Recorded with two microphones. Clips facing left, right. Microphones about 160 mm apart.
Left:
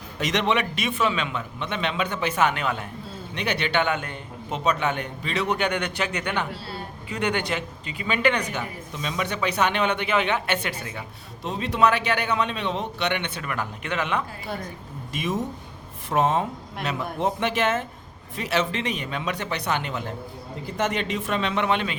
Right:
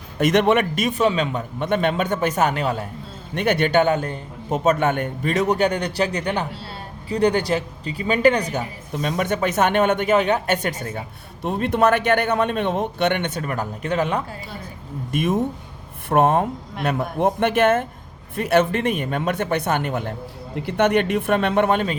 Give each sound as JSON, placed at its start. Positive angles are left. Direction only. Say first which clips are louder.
{"t": 0.2, "sound": "a man's voice", "louder": "right 7 dB", "side_deg": -50}
{"t": 3.3, "sound": "a man's voice", "louder": "right 7 dB", "side_deg": -50}
{"t": 8.9, "sound": "a man's voice", "louder": "right 8 dB", "side_deg": -50}
{"t": 15.1, "sound": "a man's voice", "louder": "right 6 dB", "side_deg": -55}
{"t": 20.6, "sound": "a man's voice", "louder": "right 8 dB", "side_deg": -65}